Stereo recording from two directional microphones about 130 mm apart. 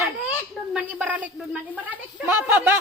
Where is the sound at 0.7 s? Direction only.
10° right (ahead or behind).